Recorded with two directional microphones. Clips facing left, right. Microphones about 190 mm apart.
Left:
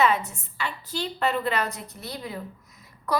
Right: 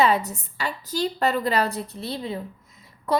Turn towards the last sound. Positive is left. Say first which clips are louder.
# right 3 dB
turn(degrees=-25)  # may be behind; listen again after turning